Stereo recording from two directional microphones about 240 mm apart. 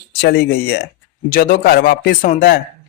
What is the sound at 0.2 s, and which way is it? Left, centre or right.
Speech, left.